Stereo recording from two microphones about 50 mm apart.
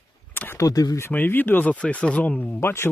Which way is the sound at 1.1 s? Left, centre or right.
Left.